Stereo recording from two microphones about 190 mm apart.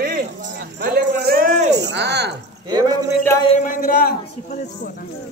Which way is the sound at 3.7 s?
45° left (ahead or behind).